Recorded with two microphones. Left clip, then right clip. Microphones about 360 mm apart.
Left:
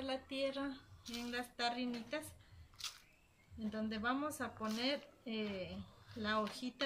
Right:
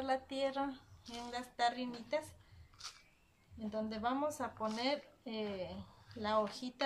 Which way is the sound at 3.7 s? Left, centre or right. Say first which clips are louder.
Right 2 dB; centre.